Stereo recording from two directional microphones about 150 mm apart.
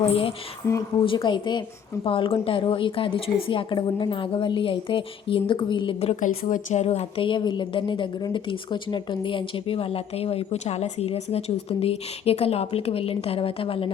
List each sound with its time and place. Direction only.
0.0 s a woman's voice: 40° left (ahead or behind)
0.6 s speech: 15° left (ahead or behind)
1.0 s a woman's voice: 35° left (ahead or behind)
6.1 s a woman's voice: 60° left (ahead or behind); by 13.9 s 40° left (ahead or behind)